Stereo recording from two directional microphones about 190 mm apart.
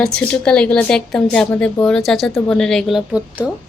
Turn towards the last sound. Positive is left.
turn(degrees=-5)  # may be behind; listen again after turning